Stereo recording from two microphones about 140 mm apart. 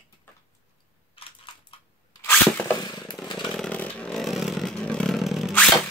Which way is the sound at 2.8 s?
30° left (ahead or behind).